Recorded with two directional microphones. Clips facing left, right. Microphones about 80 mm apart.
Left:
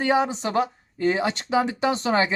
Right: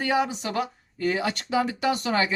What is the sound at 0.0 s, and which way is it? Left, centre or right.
Speech, left.